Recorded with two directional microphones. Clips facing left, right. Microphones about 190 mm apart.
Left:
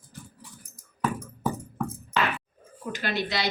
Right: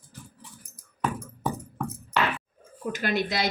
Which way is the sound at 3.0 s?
50° right (ahead or behind).